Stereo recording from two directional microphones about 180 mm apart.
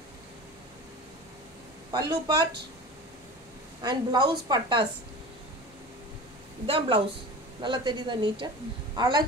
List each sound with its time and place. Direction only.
1.9 s a woman's voice: 20° right (ahead or behind)
3.8 s a woman's voice: 25° right (ahead or behind)
6.6 s a woman's voice: 30° right (ahead or behind)